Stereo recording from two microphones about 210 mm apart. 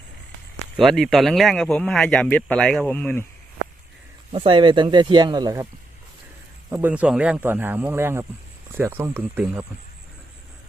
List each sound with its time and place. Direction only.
0.8 s speech: centre (ahead or behind)
4.3 s speech: 25° right (ahead or behind)
6.7 s speech: 10° right (ahead or behind)